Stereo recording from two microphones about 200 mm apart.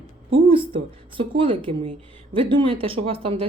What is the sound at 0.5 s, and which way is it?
Speech, 25° right (ahead or behind).